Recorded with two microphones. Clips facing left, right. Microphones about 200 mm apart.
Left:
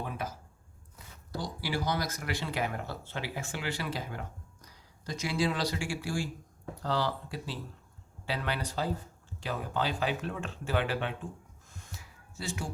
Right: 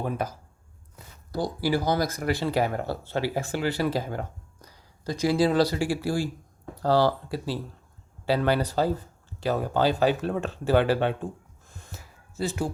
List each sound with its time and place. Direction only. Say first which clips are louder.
0.0 s speech: right 8 dB; 40° right (ahead or behind)
1.4 s speech: right 9 dB; 40° right (ahead or behind)
11.9 s a sound: right 12 dB; 40° right (ahead or behind)